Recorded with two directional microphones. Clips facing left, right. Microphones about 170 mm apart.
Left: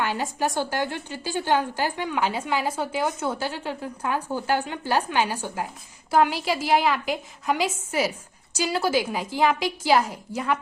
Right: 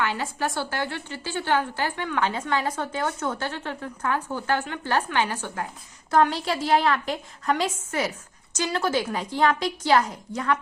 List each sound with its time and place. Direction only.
0.0 s a woman's voice: 15° left (ahead or behind)